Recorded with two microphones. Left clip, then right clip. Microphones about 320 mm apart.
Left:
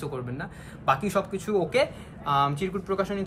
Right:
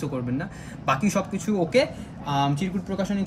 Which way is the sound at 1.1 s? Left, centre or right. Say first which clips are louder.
Left 1 dB; left.